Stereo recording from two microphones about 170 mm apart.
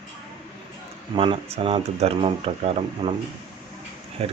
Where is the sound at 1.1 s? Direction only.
30° right (ahead or behind).